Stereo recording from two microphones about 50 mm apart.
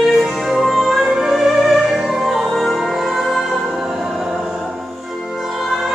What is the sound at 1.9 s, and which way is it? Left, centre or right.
Opera, centre.